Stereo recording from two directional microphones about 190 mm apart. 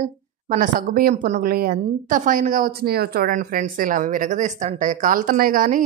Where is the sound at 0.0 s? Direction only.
45° right (ahead or behind).